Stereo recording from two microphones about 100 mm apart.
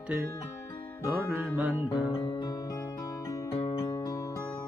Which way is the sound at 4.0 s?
40° left (ahead or behind).